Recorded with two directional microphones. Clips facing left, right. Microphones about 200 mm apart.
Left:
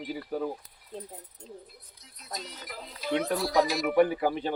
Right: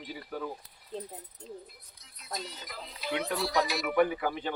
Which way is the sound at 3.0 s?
45° left (ahead or behind).